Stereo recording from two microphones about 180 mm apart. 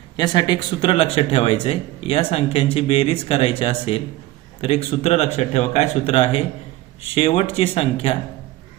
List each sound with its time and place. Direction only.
0.2 s speech: 25° left (ahead or behind)